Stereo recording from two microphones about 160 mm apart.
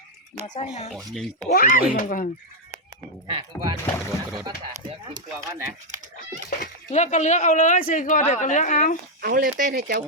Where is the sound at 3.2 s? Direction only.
30° right (ahead or behind).